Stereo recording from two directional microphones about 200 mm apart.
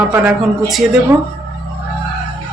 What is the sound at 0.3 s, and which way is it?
Speech, centre (ahead or behind).